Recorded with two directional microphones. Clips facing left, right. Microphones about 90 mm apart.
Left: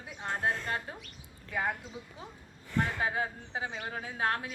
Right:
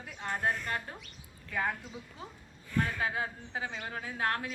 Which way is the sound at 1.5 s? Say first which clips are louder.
Even; 15° left (ahead or behind).